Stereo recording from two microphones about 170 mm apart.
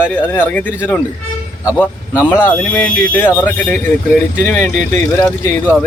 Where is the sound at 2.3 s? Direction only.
10° right (ahead or behind).